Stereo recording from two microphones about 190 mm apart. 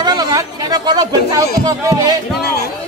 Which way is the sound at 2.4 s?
55° left (ahead or behind).